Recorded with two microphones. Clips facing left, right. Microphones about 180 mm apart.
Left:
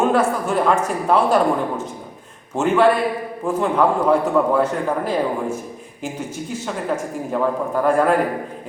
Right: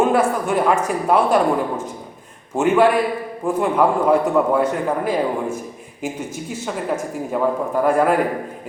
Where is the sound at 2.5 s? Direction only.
10° right (ahead or behind).